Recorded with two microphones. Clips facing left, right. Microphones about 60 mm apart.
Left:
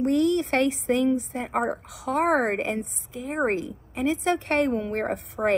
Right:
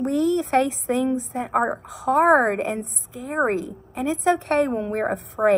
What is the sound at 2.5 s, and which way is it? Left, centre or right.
A woman's voice, left.